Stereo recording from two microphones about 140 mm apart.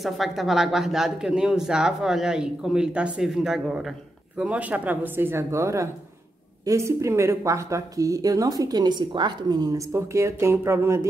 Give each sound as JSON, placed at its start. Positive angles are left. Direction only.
{"t": 0.0, "sound": "speech", "side_deg": 0}